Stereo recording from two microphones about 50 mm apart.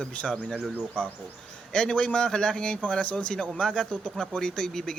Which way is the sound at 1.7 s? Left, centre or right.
Centre.